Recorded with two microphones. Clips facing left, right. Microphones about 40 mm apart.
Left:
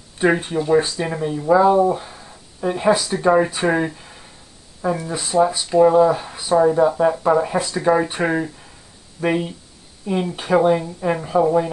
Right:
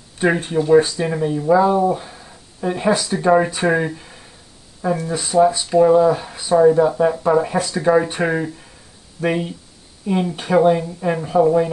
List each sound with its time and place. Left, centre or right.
0.2 s speech: centre